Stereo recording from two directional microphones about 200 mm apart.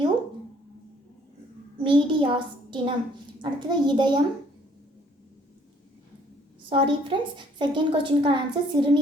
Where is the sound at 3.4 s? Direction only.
20° right (ahead or behind).